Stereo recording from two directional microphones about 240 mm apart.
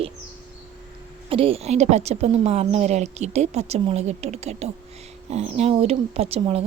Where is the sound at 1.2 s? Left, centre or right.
Right.